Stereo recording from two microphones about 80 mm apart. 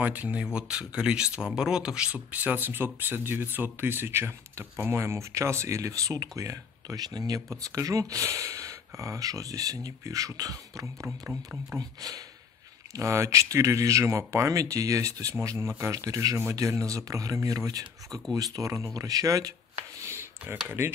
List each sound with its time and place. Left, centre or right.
0.0 s speech: right
12.9 s speech: right
20.0 s a sound: right
20.8 s speech: right